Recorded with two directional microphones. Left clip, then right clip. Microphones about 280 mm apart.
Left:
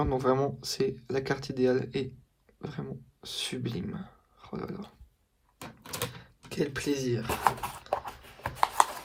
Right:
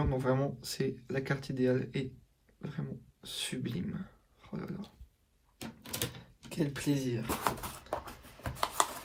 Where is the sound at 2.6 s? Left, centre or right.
Centre.